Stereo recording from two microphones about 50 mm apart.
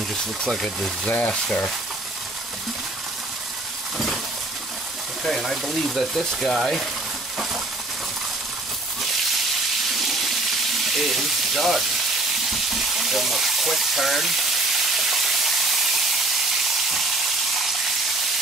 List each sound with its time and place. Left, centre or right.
0.5 s speech: centre
1.0 s speech: left
1.3 s frying: centre
5.4 s speech: centre
9.9 s water: centre
10.9 s speech: centre
12.4 s frying: centre
16.9 s frying: centre